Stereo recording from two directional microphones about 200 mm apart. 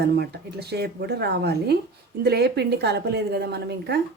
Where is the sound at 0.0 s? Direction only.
55° right (ahead or behind).